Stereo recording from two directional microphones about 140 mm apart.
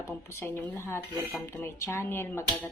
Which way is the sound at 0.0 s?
20° left (ahead or behind).